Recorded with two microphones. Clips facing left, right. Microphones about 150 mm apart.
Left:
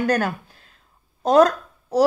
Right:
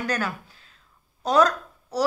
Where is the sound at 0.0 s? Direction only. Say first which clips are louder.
Left 7 dB; 55° left (ahead or behind).